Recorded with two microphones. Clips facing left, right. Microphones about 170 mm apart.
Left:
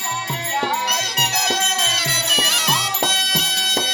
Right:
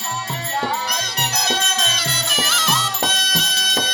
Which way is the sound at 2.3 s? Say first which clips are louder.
Right 2 dB; 15° left (ahead or behind).